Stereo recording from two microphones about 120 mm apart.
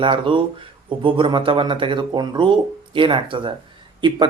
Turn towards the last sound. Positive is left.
turn(degrees=-40)  # may be behind; listen again after turning